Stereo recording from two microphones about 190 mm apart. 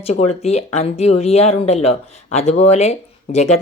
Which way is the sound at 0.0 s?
35° left (ahead or behind).